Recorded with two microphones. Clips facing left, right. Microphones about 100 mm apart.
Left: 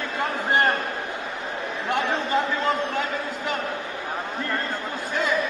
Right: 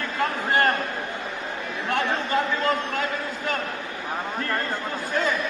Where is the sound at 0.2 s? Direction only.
20° left (ahead or behind).